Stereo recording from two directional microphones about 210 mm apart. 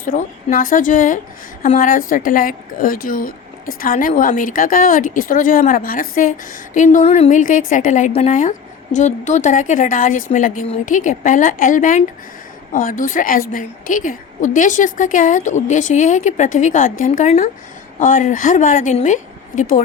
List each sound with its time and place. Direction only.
0.0 s a woman's voice: 40° left (ahead or behind)